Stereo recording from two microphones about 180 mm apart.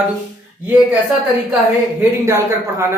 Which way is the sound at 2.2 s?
15° right (ahead or behind).